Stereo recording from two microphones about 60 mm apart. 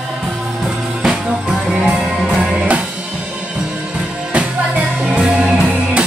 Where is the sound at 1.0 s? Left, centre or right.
Centre.